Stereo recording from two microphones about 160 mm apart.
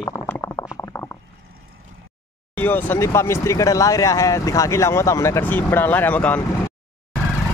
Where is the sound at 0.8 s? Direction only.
15° left (ahead or behind).